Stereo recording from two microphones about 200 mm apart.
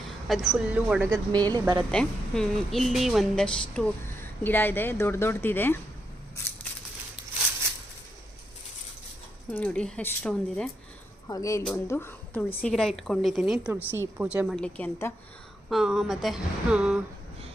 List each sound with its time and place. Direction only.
0.4 s speech: 5° right (ahead or behind)
1.3 s a woman's voice: 20° right (ahead or behind)
1.9 s a woman's voice: 5° left (ahead or behind)
9.5 s a woman's voice: 5° left (ahead or behind)
15.7 s speech: centre (ahead or behind)